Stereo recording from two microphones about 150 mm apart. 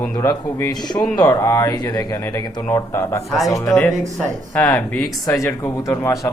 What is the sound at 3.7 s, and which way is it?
Speech, 5° left (ahead or behind).